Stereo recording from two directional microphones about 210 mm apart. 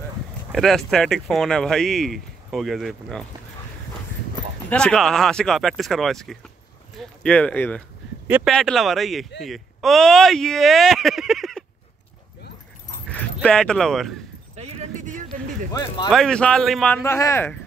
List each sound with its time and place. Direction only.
0.5 s speech: centre (ahead or behind)
4.6 s speech: 5° left (ahead or behind)
8.3 s speech: 10° right (ahead or behind)
13.1 s speech: 5° left (ahead or behind)
14.5 s a sound: 35° right (ahead or behind)
15.7 s speech: 20° left (ahead or behind)
16.1 s speech: 5° left (ahead or behind)